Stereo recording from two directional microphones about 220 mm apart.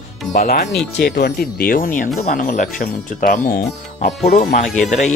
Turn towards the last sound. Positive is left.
turn(degrees=35)  # may be behind; listen again after turning